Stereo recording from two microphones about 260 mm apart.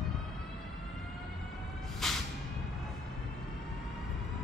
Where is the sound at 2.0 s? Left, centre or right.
Centre.